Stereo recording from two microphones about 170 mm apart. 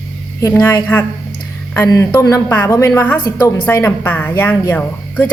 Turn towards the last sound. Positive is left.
turn(degrees=10)  # may be behind; listen again after turning